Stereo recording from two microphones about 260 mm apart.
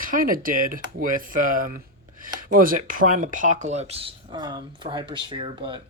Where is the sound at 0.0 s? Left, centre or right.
Right.